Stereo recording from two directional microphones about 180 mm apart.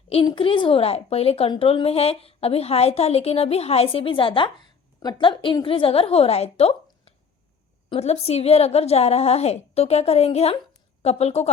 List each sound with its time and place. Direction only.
0.1 s a woman's voice: 30° left (ahead or behind)